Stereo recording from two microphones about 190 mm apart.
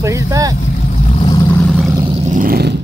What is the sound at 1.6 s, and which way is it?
Vehicle, centre (ahead or behind).